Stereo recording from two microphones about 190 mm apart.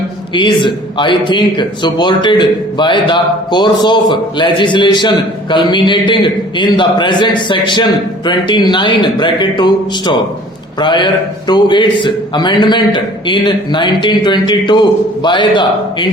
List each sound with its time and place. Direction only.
0.3 s a man's voice: 25° left (ahead or behind)